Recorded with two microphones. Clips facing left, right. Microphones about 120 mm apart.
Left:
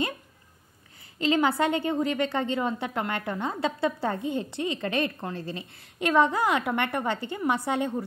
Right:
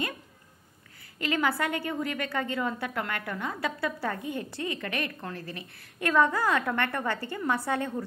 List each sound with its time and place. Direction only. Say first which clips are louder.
1.2 s a woman's voice: left 5 dB; 25° left (ahead or behind)